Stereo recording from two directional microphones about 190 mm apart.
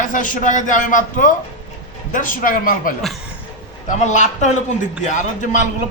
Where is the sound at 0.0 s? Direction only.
45° left (ahead or behind).